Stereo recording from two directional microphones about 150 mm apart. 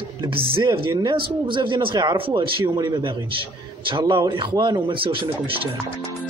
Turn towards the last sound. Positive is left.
turn(degrees=-35)  # may be behind; listen again after turning